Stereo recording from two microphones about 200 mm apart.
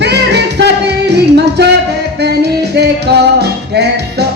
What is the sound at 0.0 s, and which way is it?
Music, 55° right (ahead or behind).